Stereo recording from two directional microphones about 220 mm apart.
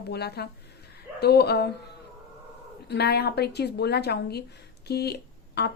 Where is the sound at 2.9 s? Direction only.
50° left (ahead or behind).